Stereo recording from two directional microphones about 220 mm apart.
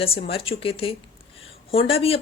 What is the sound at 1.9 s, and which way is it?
Speech, 25° left (ahead or behind).